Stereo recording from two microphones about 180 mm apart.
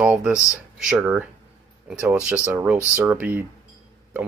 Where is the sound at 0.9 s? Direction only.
5° right (ahead or behind).